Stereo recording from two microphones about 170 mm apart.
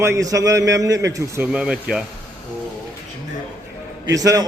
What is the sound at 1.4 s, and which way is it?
Speech, 5° right (ahead or behind).